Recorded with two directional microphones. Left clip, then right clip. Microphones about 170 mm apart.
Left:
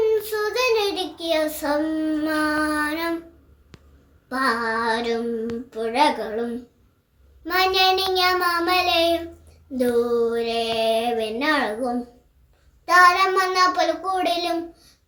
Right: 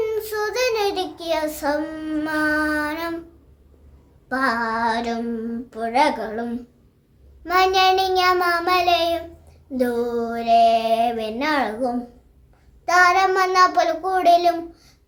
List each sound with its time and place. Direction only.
0.0 s child singing: 20° right (ahead or behind)
4.3 s child singing: 20° right (ahead or behind)
7.4 s child singing: 20° right (ahead or behind)